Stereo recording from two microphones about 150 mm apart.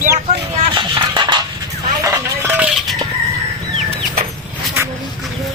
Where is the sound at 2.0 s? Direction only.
15° right (ahead or behind).